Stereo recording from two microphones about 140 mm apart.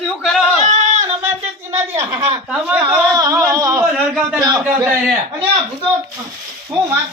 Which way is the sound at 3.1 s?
25° right (ahead or behind).